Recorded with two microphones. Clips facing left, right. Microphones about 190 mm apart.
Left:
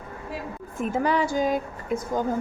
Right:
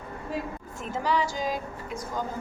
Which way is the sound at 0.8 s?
55° left (ahead or behind).